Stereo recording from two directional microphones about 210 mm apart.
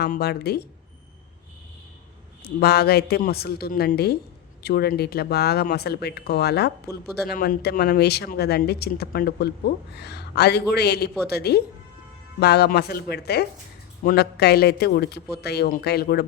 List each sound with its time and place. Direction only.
0.0 s speech: 50° left (ahead or behind)
2.6 s speech: 50° left (ahead or behind)